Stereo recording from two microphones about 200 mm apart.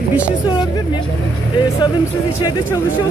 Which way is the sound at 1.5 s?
20° left (ahead or behind).